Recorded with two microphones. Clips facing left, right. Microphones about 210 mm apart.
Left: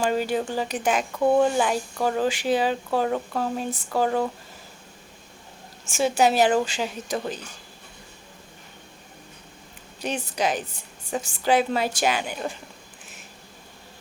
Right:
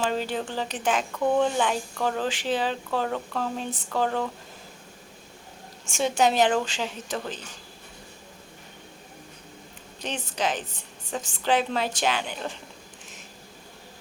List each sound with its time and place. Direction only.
0.0 s speech: 10° left (ahead or behind)
5.8 s speech: 5° left (ahead or behind)
10.0 s speech: 10° left (ahead or behind)